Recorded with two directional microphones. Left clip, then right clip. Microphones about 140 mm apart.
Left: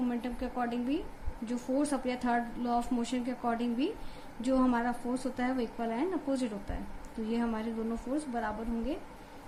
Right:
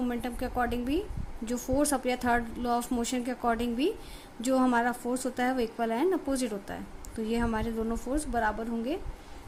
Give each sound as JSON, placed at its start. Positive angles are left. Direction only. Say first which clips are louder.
{"t": 0.1, "sound": "a woman's voice", "louder": "right 3 dB", "side_deg": -85}